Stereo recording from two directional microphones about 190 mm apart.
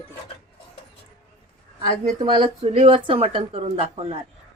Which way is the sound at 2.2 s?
25° right (ahead or behind).